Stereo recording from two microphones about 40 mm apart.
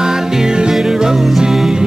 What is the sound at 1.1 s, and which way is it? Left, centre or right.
Music, centre.